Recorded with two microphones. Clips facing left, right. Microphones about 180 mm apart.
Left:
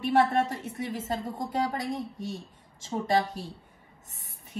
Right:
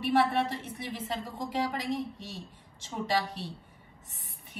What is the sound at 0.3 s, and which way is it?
A woman's voice, 45° left (ahead or behind).